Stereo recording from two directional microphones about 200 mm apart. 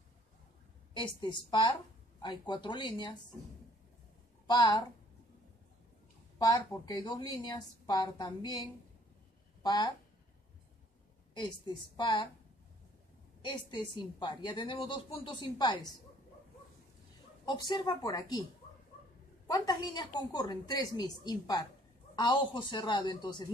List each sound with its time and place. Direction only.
0.9 s a woman's voice: 25° left (ahead or behind)
4.5 s a woman's voice: 20° left (ahead or behind)
6.3 s a woman's voice: 15° left (ahead or behind)
11.3 s a woman's voice: 20° left (ahead or behind)
13.4 s a woman's voice: 20° left (ahead or behind)
17.5 s a woman's voice: 20° left (ahead or behind)
19.4 s a woman's voice: 20° left (ahead or behind)